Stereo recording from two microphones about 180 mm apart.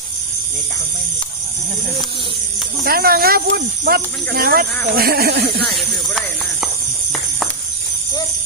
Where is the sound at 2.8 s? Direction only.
55° right (ahead or behind).